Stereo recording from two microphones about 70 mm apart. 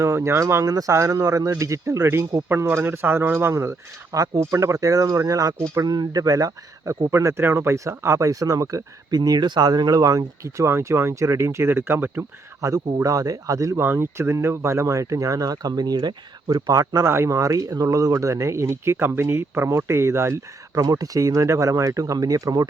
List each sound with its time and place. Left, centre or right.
0.0 s speech: right
2.0 s speech: right
5.7 s speech: right
7.1 s speech: right
12.6 s speech: right
13.7 s speech: right
20.8 s speech: right